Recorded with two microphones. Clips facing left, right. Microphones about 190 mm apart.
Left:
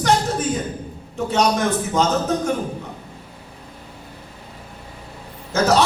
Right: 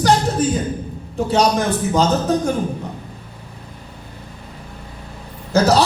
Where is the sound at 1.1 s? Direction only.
35° right (ahead or behind).